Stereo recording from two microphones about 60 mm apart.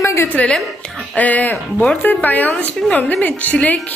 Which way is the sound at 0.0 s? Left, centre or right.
Left.